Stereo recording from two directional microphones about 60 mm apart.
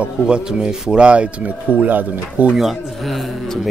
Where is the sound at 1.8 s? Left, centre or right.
Right.